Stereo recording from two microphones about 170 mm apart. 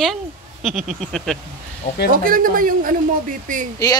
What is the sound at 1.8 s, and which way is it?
Speech, 50° left (ahead or behind).